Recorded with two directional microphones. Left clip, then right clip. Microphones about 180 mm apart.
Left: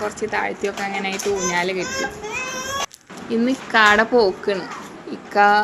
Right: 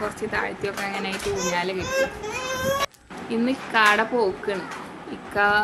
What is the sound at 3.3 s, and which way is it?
A woman's voice, 25° left (ahead or behind).